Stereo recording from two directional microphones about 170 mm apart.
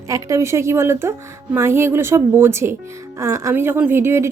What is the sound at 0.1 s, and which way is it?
A woman's voice, 15° right (ahead or behind).